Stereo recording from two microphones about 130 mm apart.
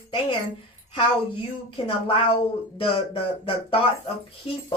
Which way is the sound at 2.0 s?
45° left (ahead or behind).